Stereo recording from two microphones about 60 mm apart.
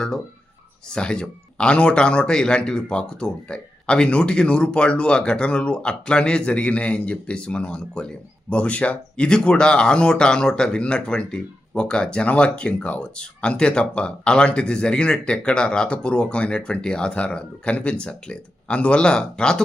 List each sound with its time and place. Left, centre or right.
0.9 s speech: centre